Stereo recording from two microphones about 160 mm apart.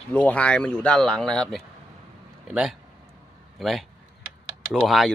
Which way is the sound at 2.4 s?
5° right (ahead or behind).